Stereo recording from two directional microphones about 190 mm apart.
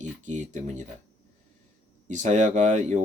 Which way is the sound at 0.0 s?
40° right (ahead or behind).